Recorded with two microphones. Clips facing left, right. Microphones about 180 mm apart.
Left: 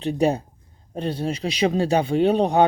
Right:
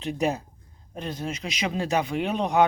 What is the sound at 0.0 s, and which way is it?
Speech, 35° left (ahead or behind).